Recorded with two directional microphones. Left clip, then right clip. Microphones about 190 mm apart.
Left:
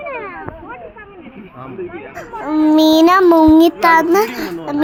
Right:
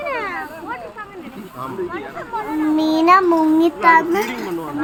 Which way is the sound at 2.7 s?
45° left (ahead or behind).